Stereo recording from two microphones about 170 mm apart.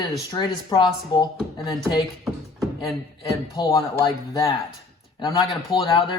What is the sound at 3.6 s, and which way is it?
Speech, 25° left (ahead or behind).